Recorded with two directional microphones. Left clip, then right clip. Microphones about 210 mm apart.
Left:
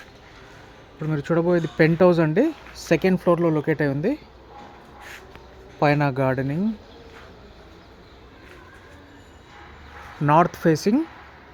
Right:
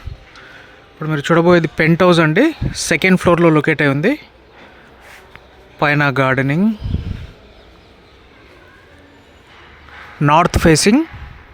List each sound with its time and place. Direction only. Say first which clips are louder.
0.9 s speech: right 9 dB; 10° right (ahead or behind)
5.8 s speech: right 6 dB; 10° right (ahead or behind)
10.2 s speech: right 6 dB; 25° right (ahead or behind)